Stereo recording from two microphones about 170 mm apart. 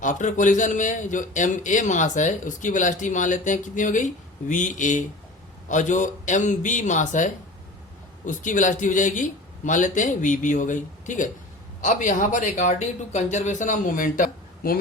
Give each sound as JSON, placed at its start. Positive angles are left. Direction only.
{"t": 0.0, "sound": "a man's voice", "side_deg": 50}